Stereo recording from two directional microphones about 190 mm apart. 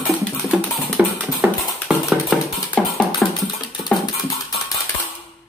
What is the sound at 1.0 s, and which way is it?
Music, 5° right (ahead or behind).